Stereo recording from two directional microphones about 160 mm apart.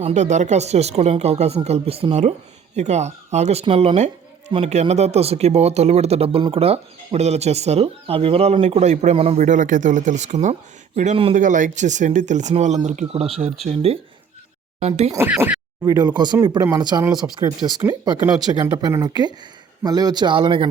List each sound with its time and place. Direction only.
0.0 s speech: 45° right (ahead or behind)
9.4 s speech: 50° right (ahead or behind)
15.1 s speech: 15° right (ahead or behind)
15.8 s a man's voice: 25° right (ahead or behind)
16.4 s speech: 15° right (ahead or behind)
16.7 s a man's voice: 25° right (ahead or behind)
17.1 s speech: 5° right (ahead or behind)
18.8 s a man's voice: 25° right (ahead or behind)